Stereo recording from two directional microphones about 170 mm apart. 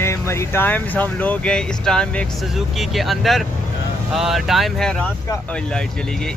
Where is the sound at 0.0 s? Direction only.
15° left (ahead or behind).